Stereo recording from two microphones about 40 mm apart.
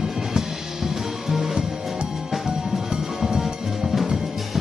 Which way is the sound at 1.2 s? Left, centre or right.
Centre.